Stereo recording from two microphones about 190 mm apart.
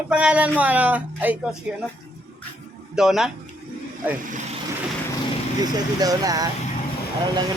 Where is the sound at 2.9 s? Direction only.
Centre (ahead or behind).